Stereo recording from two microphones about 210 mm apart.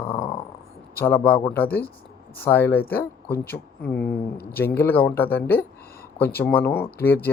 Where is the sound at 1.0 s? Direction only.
10° left (ahead or behind).